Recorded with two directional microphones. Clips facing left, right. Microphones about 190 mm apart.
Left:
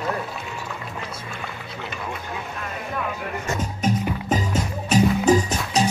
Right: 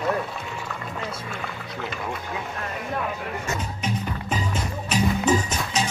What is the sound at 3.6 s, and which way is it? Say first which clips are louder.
Music: left 5 dB; 45° left (ahead or behind).